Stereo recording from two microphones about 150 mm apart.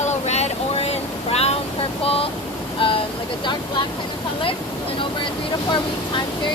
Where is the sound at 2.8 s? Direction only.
35° left (ahead or behind).